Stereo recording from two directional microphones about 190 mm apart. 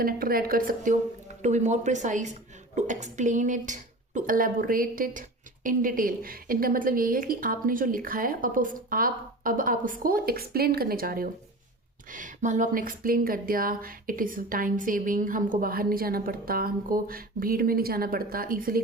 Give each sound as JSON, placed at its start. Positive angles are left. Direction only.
{"t": 0.0, "sound": "a woman's voice", "side_deg": -50}